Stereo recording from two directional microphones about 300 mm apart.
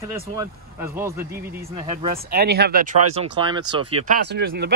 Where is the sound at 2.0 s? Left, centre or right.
Right.